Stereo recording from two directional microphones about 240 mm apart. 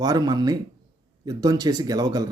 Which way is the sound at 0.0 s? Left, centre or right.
Centre.